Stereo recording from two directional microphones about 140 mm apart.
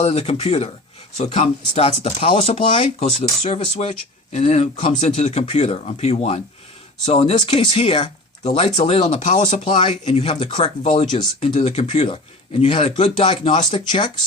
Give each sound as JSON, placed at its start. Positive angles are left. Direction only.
{"t": 0.0, "sound": "speech", "side_deg": 45}
{"t": 8.4, "sound": "speech", "side_deg": 55}
{"t": 9.7, "sound": "speech", "side_deg": 40}
{"t": 10.0, "sound": "speech", "side_deg": 50}